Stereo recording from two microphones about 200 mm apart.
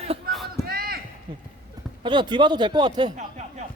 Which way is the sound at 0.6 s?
50° right (ahead or behind).